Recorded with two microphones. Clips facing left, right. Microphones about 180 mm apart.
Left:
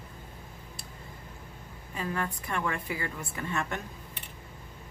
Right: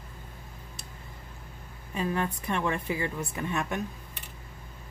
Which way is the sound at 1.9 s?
20° right (ahead or behind).